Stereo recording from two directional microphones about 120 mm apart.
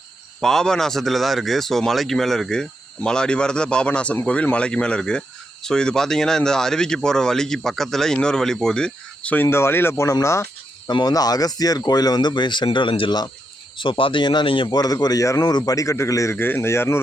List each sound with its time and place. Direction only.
0.4 s speech: 5° left (ahead or behind); by 17.0 s 20° left (ahead or behind)